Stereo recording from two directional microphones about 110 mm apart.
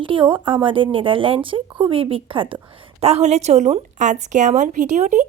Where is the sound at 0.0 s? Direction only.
50° right (ahead or behind).